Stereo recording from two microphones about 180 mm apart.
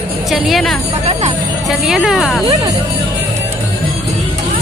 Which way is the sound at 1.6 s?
Centre (ahead or behind).